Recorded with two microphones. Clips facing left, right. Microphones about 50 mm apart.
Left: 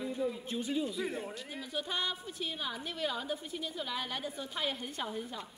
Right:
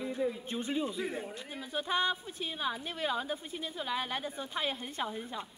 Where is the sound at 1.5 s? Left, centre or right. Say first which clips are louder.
Right 5 dB; right.